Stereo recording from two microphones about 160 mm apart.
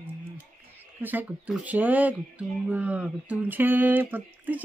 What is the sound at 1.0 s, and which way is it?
Speech, 10° right (ahead or behind).